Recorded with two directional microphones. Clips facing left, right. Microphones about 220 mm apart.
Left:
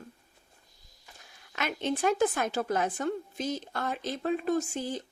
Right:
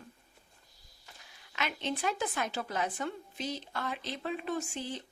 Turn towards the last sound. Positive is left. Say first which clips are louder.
# left 6 dB
turn(degrees=40)  # may be behind; listen again after turning